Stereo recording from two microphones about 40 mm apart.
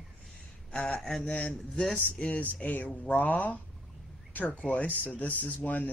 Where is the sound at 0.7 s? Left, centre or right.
Left.